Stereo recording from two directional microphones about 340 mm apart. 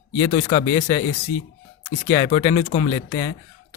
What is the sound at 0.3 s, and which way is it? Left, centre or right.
Speech, left.